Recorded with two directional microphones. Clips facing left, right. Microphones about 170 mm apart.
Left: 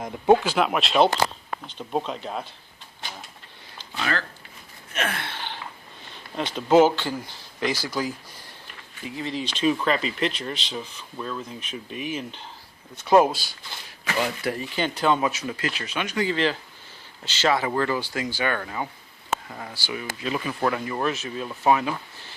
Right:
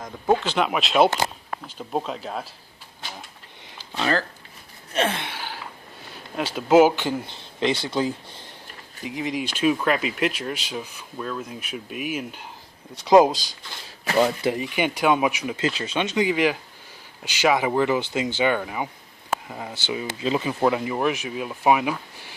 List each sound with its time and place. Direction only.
0.3 s speech: 5° left (ahead or behind)
4.0 s speech: 35° right (ahead or behind)
4.9 s speech: 25° right (ahead or behind)
5.3 s a sound: 5° right (ahead or behind)
6.3 s speech: 10° right (ahead or behind); by 8.4 s 25° right (ahead or behind)
9.0 s speech: 15° right (ahead or behind)
14.0 s a sound: 35° right (ahead or behind)
14.4 s speech: 15° right (ahead or behind)